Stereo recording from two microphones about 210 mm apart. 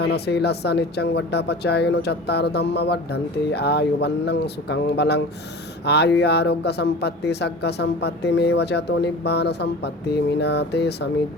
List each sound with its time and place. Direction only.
0.0 s speech: 50° left (ahead or behind)